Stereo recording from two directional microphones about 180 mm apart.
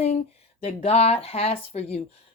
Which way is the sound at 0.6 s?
35° left (ahead or behind).